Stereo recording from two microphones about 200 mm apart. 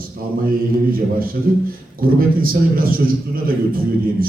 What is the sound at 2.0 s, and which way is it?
Speech, 45° right (ahead or behind).